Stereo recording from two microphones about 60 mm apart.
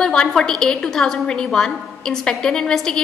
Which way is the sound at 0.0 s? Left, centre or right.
Centre.